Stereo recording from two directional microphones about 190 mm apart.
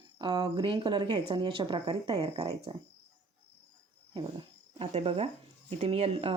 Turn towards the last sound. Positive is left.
turn(degrees=-30)  # may be behind; listen again after turning